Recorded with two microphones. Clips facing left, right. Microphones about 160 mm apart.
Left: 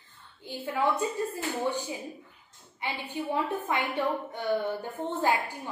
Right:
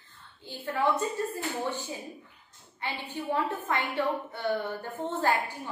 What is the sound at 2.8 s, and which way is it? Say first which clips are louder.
A woman's voice: left 1 dB; 15° left (ahead or behind).